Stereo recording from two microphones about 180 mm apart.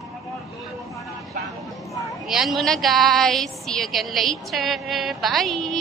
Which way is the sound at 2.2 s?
Centre (ahead or behind).